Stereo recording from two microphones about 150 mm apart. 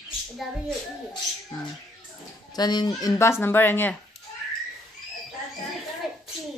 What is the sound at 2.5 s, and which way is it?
A woman's voice, 25° left (ahead or behind).